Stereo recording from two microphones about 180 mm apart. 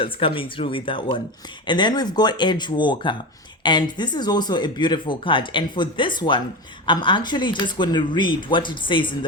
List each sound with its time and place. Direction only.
0.0 s speech: 30° left (ahead or behind)